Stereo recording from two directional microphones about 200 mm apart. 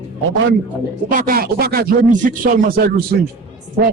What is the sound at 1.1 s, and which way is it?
Speech, 45° right (ahead or behind).